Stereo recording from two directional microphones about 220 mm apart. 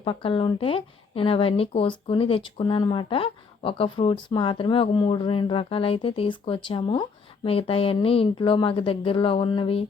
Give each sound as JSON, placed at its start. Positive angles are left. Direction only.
{"t": 0.0, "sound": "speech", "side_deg": 25}